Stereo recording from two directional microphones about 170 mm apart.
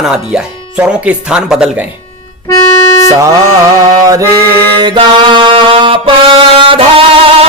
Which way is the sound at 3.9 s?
20° right (ahead or behind).